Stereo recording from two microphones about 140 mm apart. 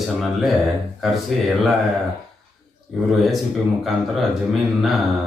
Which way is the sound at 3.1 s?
Centre (ahead or behind).